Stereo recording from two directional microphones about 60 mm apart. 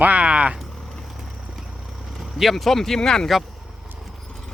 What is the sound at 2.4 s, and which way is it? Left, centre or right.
Speech, centre.